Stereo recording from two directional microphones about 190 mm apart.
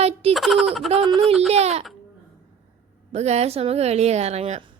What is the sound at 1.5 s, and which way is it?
Speech, 35° right (ahead or behind).